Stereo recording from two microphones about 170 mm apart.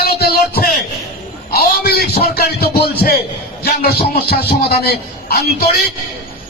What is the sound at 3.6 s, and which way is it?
Music, 65° left (ahead or behind).